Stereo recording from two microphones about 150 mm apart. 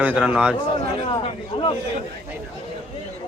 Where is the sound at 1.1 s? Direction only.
35° left (ahead or behind).